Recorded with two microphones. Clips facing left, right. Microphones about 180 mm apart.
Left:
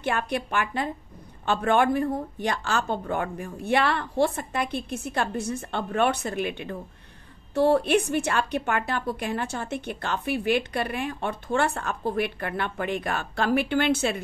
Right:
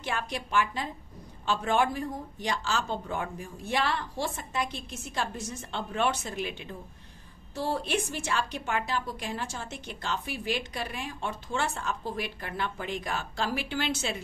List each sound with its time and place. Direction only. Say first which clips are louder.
0.0 s a woman's voice: left 7 dB; 60° left (ahead or behind)